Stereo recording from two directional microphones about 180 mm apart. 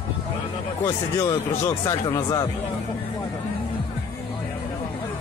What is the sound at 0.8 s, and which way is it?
Speech, 15° left (ahead or behind).